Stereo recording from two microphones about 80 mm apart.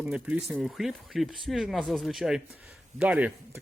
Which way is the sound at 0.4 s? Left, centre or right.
Centre.